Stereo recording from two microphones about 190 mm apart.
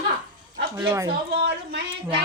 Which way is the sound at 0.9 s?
15° right (ahead or behind).